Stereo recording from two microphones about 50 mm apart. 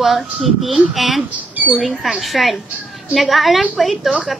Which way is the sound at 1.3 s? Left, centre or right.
Right.